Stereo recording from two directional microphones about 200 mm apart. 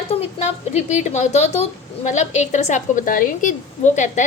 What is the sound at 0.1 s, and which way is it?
A woman's voice, 30° left (ahead or behind).